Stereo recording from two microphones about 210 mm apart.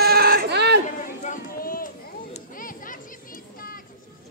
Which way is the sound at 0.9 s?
35° left (ahead or behind).